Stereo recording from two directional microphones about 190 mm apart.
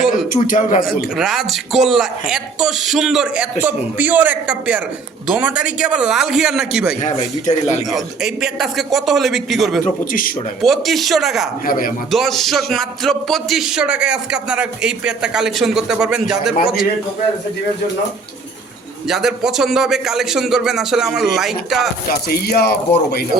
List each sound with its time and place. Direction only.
0.1 s a man's voice: 45° left (ahead or behind)
0.9 s speech: centre (ahead or behind)
7.0 s speech: 40° left (ahead or behind)
7.9 s speech: centre (ahead or behind)
10.1 s speech: 45° left (ahead or behind)
10.6 s speech: centre (ahead or behind)
11.6 s speech: 50° left (ahead or behind)
12.1 s speech: centre (ahead or behind)
19.0 s speech: centre (ahead or behind)
22.3 s speech: 55° left (ahead or behind)